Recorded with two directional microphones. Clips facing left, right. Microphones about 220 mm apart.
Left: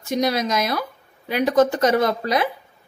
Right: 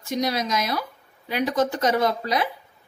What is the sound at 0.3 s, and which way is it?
A woman's voice, 55° left (ahead or behind).